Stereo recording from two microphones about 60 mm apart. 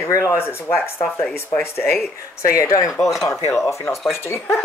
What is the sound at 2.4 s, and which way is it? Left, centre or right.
Speech, left.